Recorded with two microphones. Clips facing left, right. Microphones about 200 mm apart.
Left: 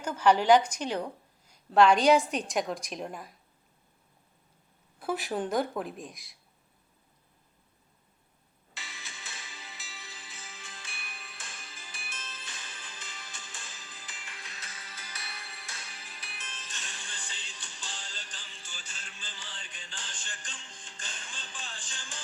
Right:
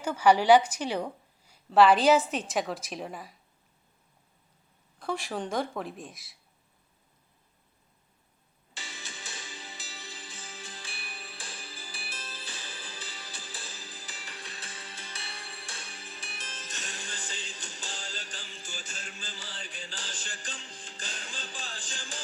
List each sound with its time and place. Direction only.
0.0 s a woman's voice: 10° right (ahead or behind)
4.9 s a woman's voice: 5° left (ahead or behind)
8.7 s music: centre (ahead or behind)
9.0 s music: 30° right (ahead or behind)
9.7 s music: centre (ahead or behind)
10.0 s music: 30° right (ahead or behind)